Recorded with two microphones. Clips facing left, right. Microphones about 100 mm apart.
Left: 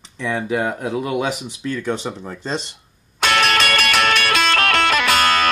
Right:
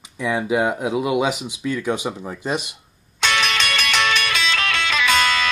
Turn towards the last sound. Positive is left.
turn(degrees=50)  # may be behind; listen again after turning